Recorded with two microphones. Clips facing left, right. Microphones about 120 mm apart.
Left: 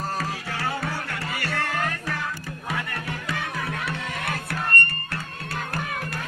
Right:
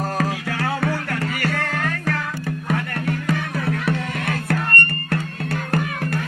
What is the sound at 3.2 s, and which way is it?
Music, 50° right (ahead or behind).